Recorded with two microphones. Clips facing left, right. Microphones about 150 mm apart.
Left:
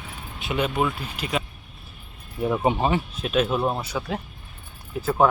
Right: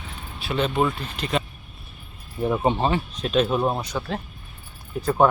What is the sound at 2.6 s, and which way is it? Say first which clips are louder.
Speech: left 1 dB; 10° left (ahead or behind).